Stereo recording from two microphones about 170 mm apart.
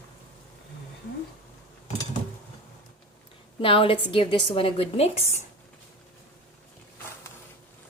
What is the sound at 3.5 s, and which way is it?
A woman's voice, 30° left (ahead or behind).